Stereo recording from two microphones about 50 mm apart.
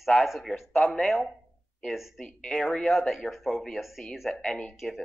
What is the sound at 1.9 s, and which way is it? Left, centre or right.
Speech, centre.